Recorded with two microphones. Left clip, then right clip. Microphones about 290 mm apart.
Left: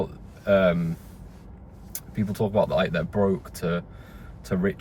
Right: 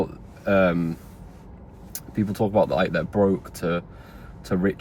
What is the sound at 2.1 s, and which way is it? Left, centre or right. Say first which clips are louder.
Speech: right 3 dB; centre.